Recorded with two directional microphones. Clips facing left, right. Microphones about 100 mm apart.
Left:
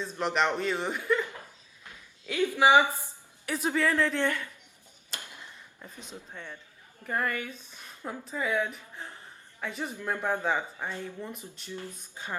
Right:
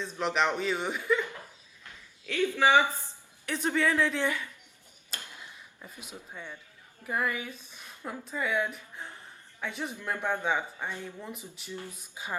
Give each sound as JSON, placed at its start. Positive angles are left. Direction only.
{"t": 0.0, "sound": "speech", "side_deg": 0}
{"t": 2.2, "sound": "speech", "side_deg": 15}
{"t": 3.4, "sound": "speech", "side_deg": 5}
{"t": 5.8, "sound": "speech", "side_deg": -10}